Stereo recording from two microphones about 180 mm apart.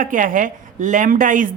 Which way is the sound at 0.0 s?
50° right (ahead or behind).